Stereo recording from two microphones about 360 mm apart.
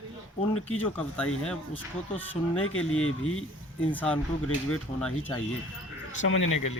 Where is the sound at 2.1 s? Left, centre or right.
Left.